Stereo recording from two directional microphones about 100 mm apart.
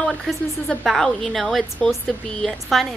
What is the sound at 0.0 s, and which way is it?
A woman's voice, centre (ahead or behind).